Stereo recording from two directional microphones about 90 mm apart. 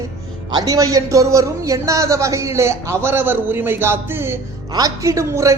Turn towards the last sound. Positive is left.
turn(degrees=-35)  # may be behind; listen again after turning